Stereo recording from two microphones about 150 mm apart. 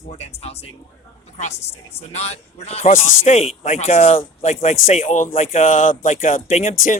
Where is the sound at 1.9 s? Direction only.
45° left (ahead or behind).